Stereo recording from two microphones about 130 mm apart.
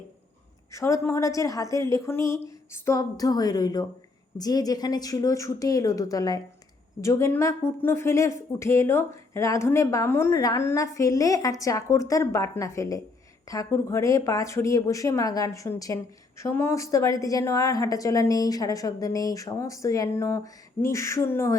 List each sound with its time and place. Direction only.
0.7 s speech: 25° left (ahead or behind)